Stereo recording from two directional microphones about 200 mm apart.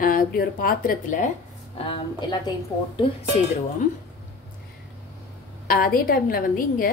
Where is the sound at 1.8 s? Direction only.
25° left (ahead or behind).